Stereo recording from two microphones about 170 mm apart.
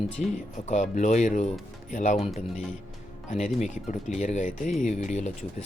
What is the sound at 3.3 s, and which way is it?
Speech, 45° left (ahead or behind).